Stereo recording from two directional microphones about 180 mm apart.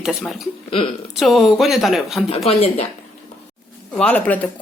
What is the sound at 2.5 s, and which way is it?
Speech, 35° left (ahead or behind).